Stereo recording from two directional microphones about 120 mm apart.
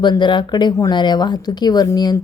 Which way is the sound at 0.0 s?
40° left (ahead or behind).